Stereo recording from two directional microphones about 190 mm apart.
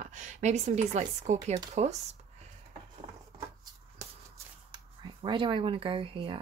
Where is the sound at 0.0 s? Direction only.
40° right (ahead or behind).